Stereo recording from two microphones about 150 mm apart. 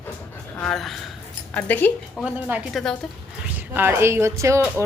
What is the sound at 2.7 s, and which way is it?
Speech, 5° left (ahead or behind).